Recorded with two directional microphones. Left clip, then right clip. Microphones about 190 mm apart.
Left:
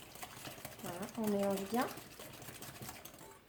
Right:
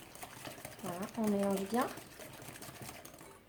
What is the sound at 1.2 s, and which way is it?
Speech, 30° right (ahead or behind).